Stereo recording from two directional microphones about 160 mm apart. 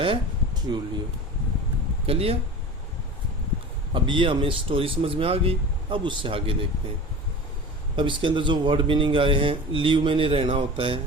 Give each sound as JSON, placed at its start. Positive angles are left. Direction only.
{"t": 0.0, "sound": "a sound", "side_deg": -30}
{"t": 2.0, "sound": "a man's voice", "side_deg": -35}
{"t": 3.9, "sound": "a man's voice", "side_deg": -30}
{"t": 7.9, "sound": "a man's voice", "side_deg": -30}